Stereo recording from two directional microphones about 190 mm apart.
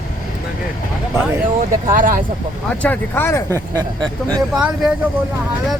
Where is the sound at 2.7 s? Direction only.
10° left (ahead or behind).